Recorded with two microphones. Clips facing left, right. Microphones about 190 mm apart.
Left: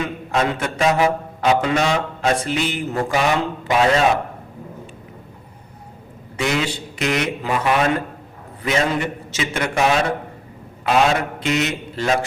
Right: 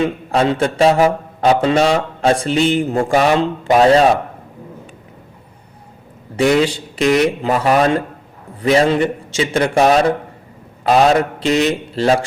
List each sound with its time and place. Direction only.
0.0 s a man's voice: 30° right (ahead or behind)
6.3 s a man's voice: 35° right (ahead or behind)